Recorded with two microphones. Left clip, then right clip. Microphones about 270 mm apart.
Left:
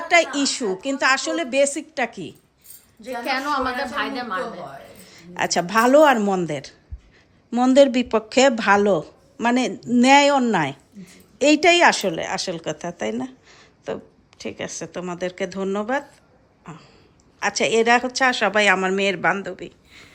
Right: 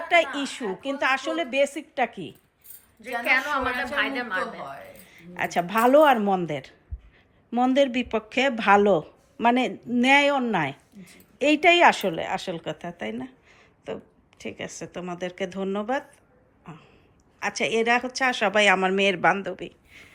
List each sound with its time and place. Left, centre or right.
0.1 s speech: centre
3.0 s a woman's voice: left
5.0 s speech: centre
16.6 s a sound: centre
17.4 s speech: centre